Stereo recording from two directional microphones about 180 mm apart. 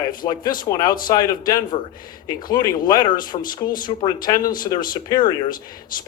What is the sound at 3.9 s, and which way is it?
Speech, 25° left (ahead or behind).